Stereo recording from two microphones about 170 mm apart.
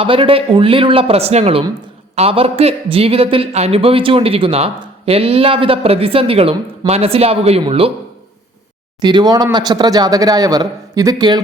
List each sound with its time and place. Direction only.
0.0 s speech: 30° right (ahead or behind)
9.0 s speech: 25° right (ahead or behind)